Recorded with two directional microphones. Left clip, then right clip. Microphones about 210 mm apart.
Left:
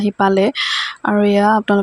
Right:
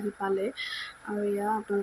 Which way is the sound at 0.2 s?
45° left (ahead or behind).